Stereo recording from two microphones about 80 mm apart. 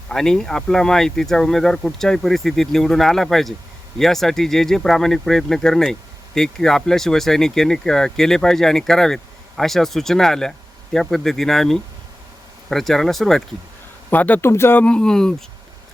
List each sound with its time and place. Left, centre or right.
0.1 s speech: centre
14.1 s speech: left
14.4 s speech: left
14.8 s speech: centre